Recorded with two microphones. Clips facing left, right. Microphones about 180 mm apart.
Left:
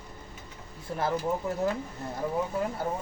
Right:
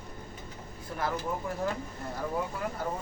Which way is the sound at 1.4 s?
25° left (ahead or behind).